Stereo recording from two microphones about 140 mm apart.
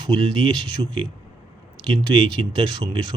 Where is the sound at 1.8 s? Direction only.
35° right (ahead or behind).